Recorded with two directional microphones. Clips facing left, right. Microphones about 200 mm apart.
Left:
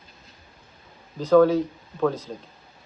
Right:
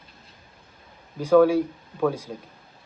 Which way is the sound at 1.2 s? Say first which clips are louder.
Even; 10° right (ahead or behind).